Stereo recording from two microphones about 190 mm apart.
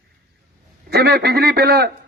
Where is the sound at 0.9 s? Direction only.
55° right (ahead or behind).